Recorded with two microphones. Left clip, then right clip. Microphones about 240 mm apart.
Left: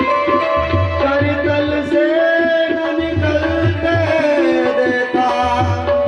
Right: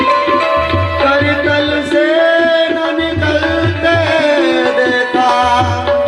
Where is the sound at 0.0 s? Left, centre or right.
Centre.